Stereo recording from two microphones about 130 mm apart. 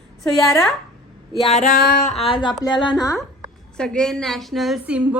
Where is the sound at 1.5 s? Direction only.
70° left (ahead or behind); by 2.1 s 90° left.